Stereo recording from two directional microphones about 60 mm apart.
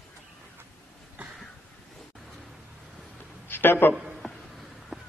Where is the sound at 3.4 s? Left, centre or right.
Left.